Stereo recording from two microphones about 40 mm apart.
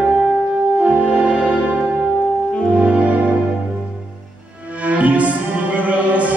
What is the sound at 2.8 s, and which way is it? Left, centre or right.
Music, right.